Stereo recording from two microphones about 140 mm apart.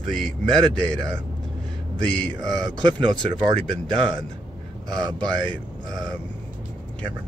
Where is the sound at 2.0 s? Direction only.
5° left (ahead or behind).